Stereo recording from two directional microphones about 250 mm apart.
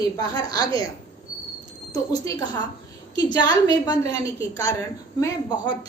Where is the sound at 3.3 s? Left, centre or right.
Centre.